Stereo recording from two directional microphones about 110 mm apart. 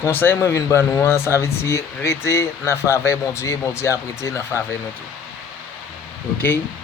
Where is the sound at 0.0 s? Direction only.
20° left (ahead or behind).